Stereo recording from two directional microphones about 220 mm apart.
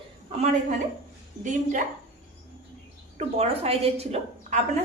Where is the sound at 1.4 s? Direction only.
35° right (ahead or behind).